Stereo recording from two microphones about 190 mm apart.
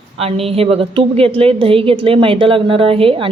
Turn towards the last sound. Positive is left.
turn(degrees=-30)  # may be behind; listen again after turning